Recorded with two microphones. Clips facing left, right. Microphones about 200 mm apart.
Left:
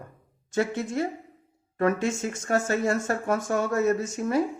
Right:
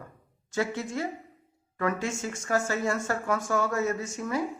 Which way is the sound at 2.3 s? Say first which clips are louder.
Left 1 dB; 25° left (ahead or behind).